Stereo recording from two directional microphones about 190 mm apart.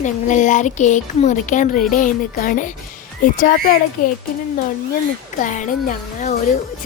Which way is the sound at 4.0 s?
45° left (ahead or behind).